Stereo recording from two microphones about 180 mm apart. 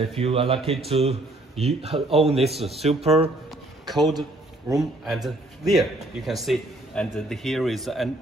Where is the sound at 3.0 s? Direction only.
35° right (ahead or behind).